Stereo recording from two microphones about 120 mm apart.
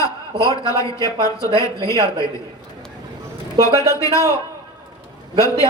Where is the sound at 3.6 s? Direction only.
25° left (ahead or behind).